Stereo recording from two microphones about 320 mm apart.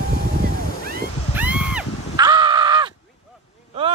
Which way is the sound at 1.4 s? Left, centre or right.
Centre.